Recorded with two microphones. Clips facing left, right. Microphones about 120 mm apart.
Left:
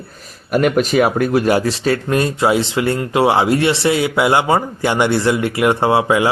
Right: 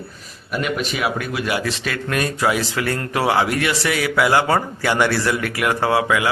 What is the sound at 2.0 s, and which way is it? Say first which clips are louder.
Speech: left 1 dB; 25° left (ahead or behind).